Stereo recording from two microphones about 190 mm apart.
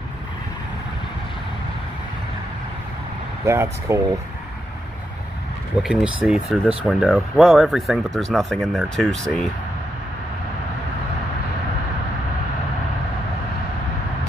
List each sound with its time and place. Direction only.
3.4 s speech: 15° right (ahead or behind)
5.8 s speech: 5° right (ahead or behind)